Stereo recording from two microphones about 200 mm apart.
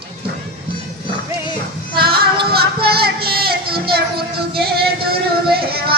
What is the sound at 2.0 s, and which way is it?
Music, 50° right (ahead or behind).